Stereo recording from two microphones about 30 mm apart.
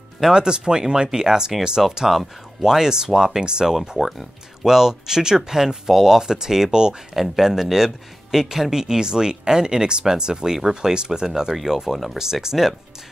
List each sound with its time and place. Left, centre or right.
0.3 s speech: right
2.0 s speech: centre
7.2 s speech: centre